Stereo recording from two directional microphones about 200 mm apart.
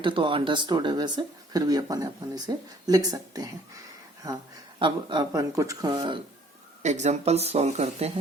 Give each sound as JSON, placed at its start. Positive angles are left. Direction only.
{"t": 0.0, "sound": "speech", "side_deg": -25}
{"t": 4.8, "sound": "speech", "side_deg": -25}
{"t": 6.8, "sound": "speech", "side_deg": -35}